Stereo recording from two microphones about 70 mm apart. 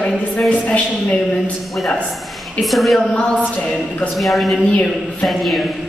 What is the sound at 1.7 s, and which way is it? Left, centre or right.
A woman's voice, centre.